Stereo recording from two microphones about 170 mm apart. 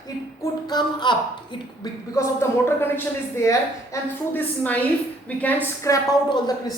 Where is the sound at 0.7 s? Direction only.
25° left (ahead or behind).